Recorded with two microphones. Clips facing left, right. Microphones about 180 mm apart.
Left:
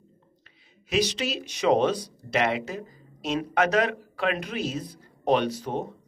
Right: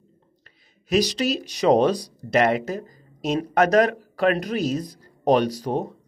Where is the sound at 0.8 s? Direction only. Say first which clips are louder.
Right 5 dB; 40° right (ahead or behind).